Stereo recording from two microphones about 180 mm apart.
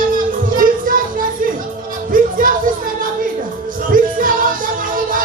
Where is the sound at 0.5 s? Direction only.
50° right (ahead or behind).